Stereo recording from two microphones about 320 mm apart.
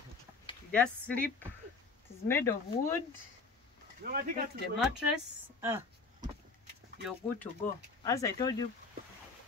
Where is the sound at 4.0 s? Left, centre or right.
Right.